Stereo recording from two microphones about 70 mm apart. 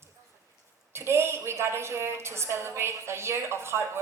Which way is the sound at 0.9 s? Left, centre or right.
Right.